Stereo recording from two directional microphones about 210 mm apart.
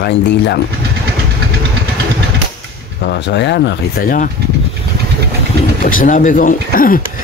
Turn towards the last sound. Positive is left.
turn(degrees=40)  # may be behind; listen again after turning